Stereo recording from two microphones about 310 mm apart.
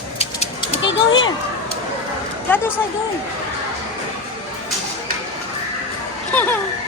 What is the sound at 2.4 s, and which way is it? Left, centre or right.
Speech, centre.